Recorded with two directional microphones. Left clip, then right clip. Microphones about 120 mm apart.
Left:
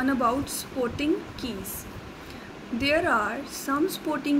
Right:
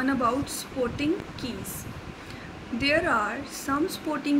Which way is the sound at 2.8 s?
75° left (ahead or behind).